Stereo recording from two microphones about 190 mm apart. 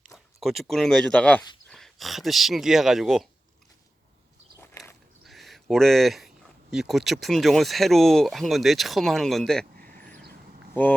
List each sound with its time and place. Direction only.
0.0 s speech: centre (ahead or behind)
5.2 s speech: centre (ahead or behind)
9.7 s a sound: 50° right (ahead or behind)